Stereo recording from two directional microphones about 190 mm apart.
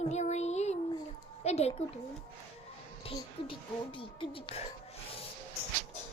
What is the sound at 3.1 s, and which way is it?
Speech, 25° left (ahead or behind).